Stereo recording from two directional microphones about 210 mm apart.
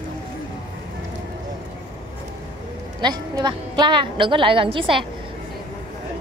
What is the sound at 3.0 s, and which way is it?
A woman's voice, 20° right (ahead or behind).